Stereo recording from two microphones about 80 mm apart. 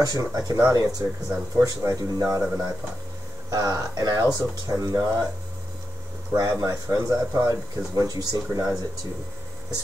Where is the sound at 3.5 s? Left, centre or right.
Right.